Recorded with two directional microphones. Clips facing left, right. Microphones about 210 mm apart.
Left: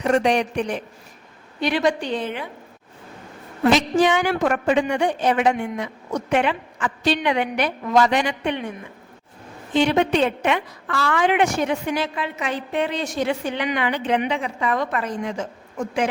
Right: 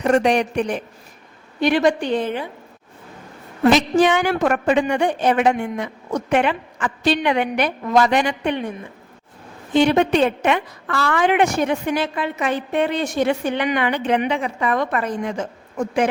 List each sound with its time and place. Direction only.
0.0 s a woman's voice: 50° right (ahead or behind)
3.7 s a woman's voice: 55° right (ahead or behind)
9.8 s a woman's voice: 45° right (ahead or behind)